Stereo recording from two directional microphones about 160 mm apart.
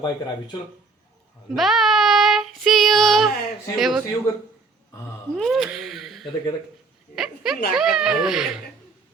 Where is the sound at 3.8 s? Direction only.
Centre (ahead or behind).